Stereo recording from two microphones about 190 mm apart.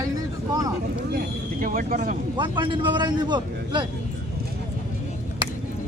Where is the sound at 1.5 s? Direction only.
45° right (ahead or behind).